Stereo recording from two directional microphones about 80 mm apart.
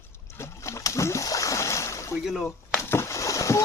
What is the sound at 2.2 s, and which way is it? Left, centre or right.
Speech, centre.